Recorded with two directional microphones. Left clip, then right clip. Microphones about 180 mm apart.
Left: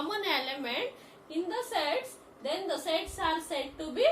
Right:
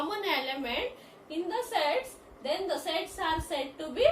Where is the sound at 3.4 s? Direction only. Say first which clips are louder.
Right 1 dB; 15° left (ahead or behind).